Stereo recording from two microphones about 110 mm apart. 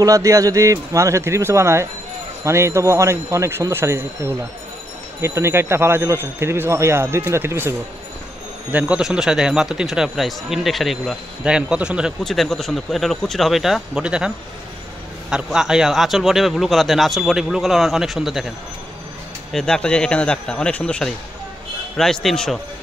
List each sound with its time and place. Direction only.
0.0 s speech: 30° right (ahead or behind)
8.7 s speech: 10° right (ahead or behind)
12.2 s speech: 5° left (ahead or behind)
19.5 s a man's voice: 5° left (ahead or behind)